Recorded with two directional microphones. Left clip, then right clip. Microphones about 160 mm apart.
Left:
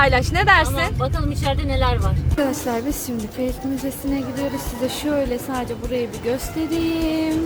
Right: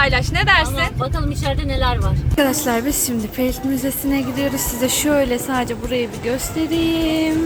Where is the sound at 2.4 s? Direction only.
5° right (ahead or behind).